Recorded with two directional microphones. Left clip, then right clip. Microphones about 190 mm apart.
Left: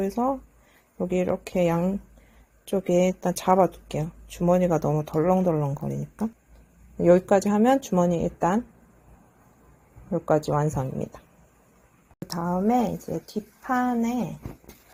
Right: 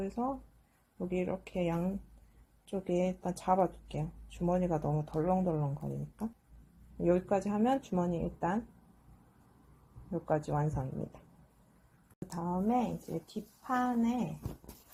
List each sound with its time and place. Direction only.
0.9 s speech: 60° left (ahead or behind)
10.1 s speech: 55° left (ahead or behind)
12.3 s speech: 50° left (ahead or behind)